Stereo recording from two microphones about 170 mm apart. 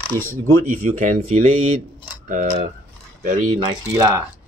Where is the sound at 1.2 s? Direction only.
35° right (ahead or behind).